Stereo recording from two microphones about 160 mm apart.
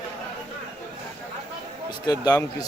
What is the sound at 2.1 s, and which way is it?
Speech, 25° left (ahead or behind).